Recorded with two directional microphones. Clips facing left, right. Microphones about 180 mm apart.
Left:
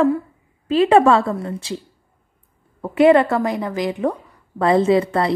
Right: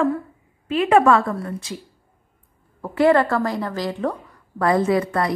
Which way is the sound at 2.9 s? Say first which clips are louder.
Left 3 dB; 20° left (ahead or behind).